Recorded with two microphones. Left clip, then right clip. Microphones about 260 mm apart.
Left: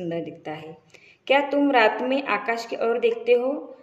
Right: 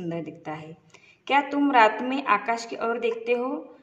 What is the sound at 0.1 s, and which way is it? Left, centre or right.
A woman's voice, centre.